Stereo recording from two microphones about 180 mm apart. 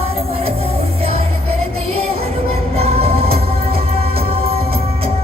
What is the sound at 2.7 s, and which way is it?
Music, 35° right (ahead or behind).